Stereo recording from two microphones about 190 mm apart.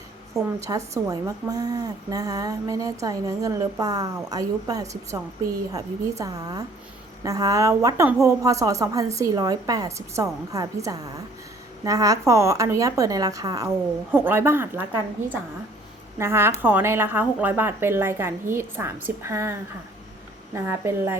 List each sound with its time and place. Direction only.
0.6 s a woman's voice: 20° right (ahead or behind)
16.1 s a woman's voice: 15° right (ahead or behind)